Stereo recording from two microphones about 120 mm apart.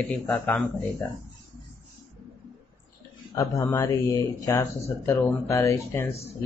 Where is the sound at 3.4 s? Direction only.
25° left (ahead or behind).